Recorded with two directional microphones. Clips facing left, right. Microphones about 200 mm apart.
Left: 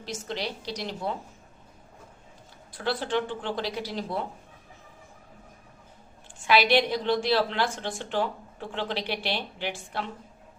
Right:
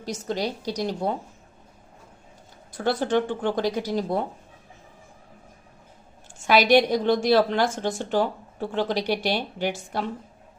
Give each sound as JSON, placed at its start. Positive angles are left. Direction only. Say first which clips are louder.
{"t": 0.0, "sound": "a woman's voice", "louder": "right 6 dB", "side_deg": -40}
{"t": 2.7, "sound": "a woman's voice", "louder": "right 5 dB", "side_deg": -45}
{"t": 6.4, "sound": "a woman's voice", "louder": "right 4 dB", "side_deg": -45}